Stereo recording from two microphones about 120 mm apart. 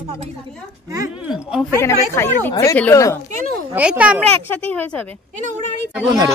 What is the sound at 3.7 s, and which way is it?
Speech, 10° right (ahead or behind).